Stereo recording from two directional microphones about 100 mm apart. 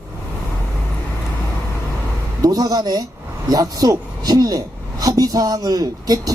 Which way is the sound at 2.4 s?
40° right (ahead or behind).